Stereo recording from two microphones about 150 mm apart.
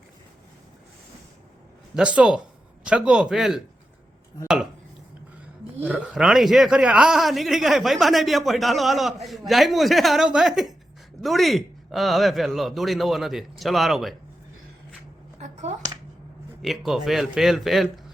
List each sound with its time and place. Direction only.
2.0 s a man's voice: 5° right (ahead or behind)
5.8 s a man's voice: 10° right (ahead or behind)
15.4 s finger snapping: 50° right (ahead or behind)
16.6 s a man's voice: centre (ahead or behind)